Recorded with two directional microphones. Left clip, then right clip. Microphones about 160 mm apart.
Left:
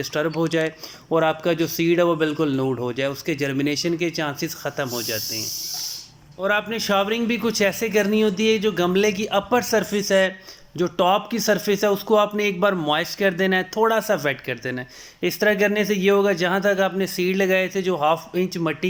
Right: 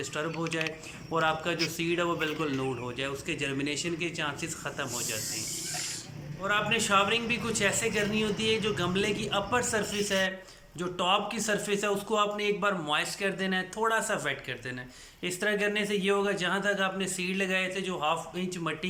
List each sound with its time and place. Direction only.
0.0 s speech: 35° left (ahead or behind)
6.4 s speech: 35° left (ahead or behind)